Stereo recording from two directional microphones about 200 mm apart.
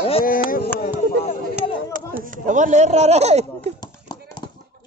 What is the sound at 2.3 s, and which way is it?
Speech, 40° right (ahead or behind).